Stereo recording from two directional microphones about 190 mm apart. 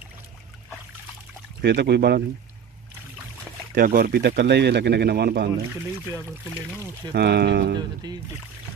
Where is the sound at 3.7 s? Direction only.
50° right (ahead or behind).